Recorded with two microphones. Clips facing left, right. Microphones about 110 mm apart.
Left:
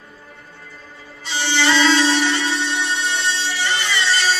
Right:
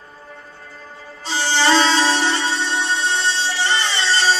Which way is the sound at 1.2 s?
35° right (ahead or behind).